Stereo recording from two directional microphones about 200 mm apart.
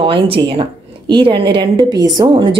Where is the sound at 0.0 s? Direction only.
25° right (ahead or behind).